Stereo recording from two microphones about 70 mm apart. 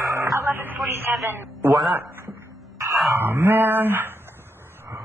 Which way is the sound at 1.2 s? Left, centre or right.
Right.